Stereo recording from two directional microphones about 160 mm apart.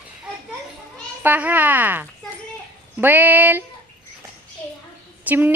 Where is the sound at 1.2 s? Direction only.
10° right (ahead or behind).